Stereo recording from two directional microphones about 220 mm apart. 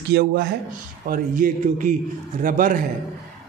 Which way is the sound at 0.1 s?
45° right (ahead or behind).